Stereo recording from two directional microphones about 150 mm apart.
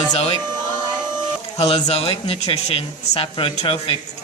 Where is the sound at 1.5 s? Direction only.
40° left (ahead or behind).